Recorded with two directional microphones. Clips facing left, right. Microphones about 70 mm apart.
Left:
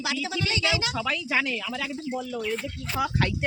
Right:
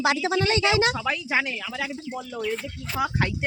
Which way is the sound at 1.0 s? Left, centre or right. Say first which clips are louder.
Right 1 dB; centre.